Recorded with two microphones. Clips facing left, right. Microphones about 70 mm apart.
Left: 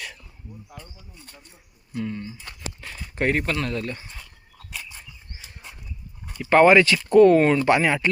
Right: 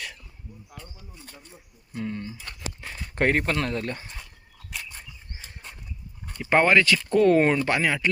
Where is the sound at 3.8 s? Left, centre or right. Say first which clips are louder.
Even; right.